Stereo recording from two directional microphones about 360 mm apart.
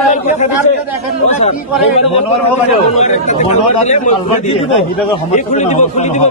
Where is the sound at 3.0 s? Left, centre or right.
Centre.